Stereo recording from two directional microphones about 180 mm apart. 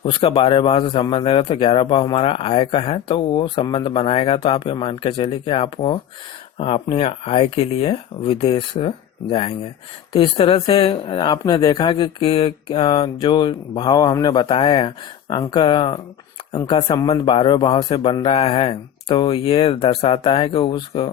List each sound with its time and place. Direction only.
0.0 s a man's voice: 30° left (ahead or behind)
10.1 s a man's voice: 30° left (ahead or behind)